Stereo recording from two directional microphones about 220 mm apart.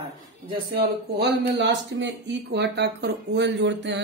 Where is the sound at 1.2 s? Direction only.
50° right (ahead or behind).